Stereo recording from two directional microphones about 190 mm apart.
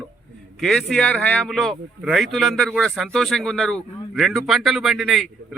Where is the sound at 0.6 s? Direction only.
Centre (ahead or behind).